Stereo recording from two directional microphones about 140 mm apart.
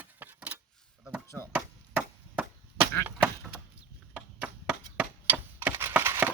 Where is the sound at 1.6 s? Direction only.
10° right (ahead or behind).